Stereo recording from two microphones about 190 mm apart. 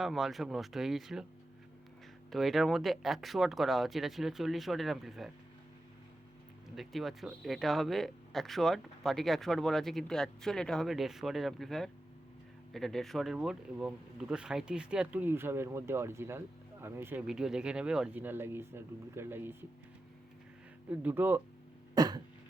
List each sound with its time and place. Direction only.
0.0 s speech: centre (ahead or behind)
2.3 s speech: centre (ahead or behind)
6.7 s speech: centre (ahead or behind)
20.9 s speech: 10° right (ahead or behind)
21.9 s cough: 20° right (ahead or behind)